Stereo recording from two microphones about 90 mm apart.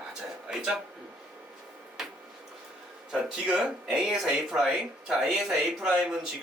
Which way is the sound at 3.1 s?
10° right (ahead or behind).